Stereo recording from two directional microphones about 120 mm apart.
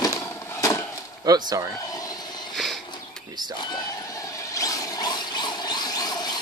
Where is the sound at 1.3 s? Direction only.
30° right (ahead or behind).